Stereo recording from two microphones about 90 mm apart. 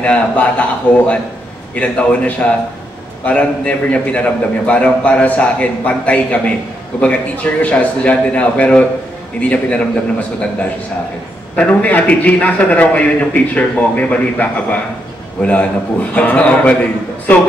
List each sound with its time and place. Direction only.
0.0 s a man's voice: 15° left (ahead or behind)
11.5 s a man's voice: 15° left (ahead or behind)